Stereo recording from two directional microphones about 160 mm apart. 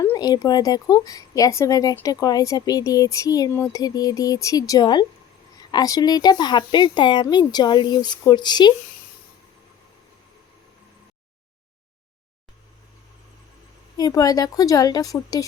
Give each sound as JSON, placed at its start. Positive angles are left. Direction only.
{"t": 0.0, "sound": "speech", "side_deg": 20}
{"t": 13.9, "sound": "speech", "side_deg": 25}